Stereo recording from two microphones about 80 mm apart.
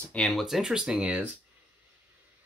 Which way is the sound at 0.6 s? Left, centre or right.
Centre.